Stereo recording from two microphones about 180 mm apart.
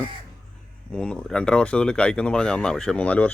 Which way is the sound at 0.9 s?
5° left (ahead or behind).